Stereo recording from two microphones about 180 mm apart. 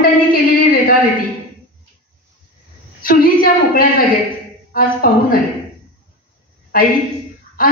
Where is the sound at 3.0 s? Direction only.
50° left (ahead or behind).